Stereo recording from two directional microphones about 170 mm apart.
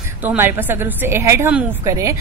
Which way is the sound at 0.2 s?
10° right (ahead or behind).